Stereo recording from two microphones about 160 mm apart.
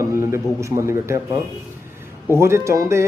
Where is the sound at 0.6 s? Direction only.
15° right (ahead or behind).